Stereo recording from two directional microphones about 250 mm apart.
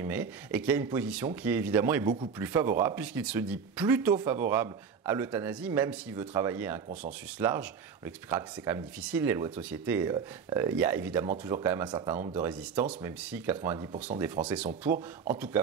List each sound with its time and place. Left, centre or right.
0.0 s speech: centre
14.4 s speech: centre